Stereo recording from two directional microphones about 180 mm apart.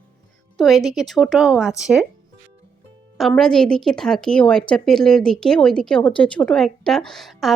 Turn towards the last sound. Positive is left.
turn(degrees=0)  # may be behind; listen again after turning